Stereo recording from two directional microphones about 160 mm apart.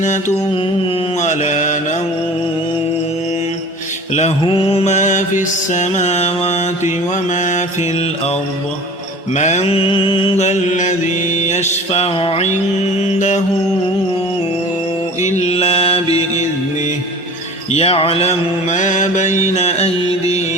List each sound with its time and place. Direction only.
1.2 s mantra: 50° left (ahead or behind)
4.1 s mantra: 45° left (ahead or behind)
9.3 s mantra: 45° left (ahead or behind)
13.0 s mantra: 50° left (ahead or behind)
15.2 s mantra: 45° left (ahead or behind)
17.7 s mantra: 40° left (ahead or behind)